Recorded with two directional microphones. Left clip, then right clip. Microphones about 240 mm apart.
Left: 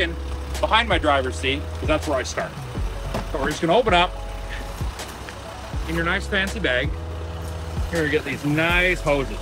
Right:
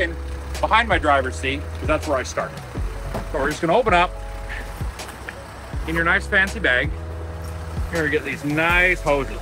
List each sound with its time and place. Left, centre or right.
0.6 s speech: centre
3.4 s speech: centre
5.9 s speech: centre
7.9 s speech: centre